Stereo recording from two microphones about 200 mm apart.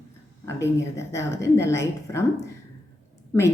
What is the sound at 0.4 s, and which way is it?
Speech, 15° left (ahead or behind).